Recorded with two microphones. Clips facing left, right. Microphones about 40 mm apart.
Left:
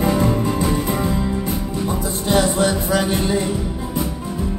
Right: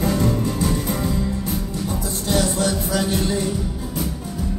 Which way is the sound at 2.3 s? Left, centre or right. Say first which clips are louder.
Left 4 dB; left.